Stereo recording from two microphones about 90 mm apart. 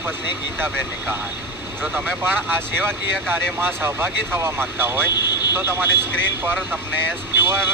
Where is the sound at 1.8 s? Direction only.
25° right (ahead or behind).